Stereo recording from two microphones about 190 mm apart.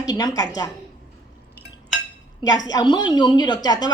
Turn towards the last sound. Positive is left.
turn(degrees=20)  # may be behind; listen again after turning